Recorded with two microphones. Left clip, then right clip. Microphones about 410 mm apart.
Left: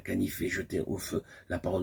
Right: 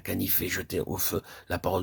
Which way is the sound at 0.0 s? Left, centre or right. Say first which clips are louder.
Right 1 dB; right.